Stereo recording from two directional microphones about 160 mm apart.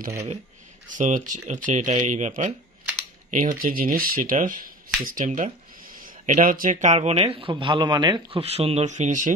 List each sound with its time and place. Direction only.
0.8 s speech: 55° right (ahead or behind)